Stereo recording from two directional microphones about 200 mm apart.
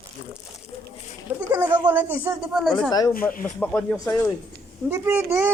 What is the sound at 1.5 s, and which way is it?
Speech, 10° right (ahead or behind).